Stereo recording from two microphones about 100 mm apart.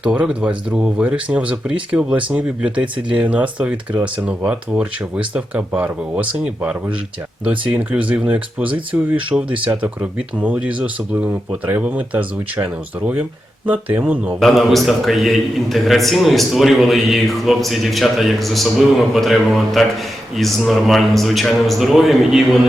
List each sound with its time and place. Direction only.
0.0 s speech: 10° right (ahead or behind)
13.7 s speech: 15° right (ahead or behind)
14.3 s a man's voice: centre (ahead or behind)